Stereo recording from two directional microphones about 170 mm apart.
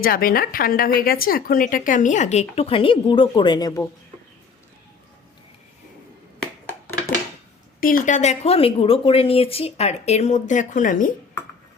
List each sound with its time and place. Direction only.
0.0 s a woman's voice: 60° left (ahead or behind); by 3.8 s 20° left (ahead or behind)
7.8 s a woman's voice: 55° left (ahead or behind)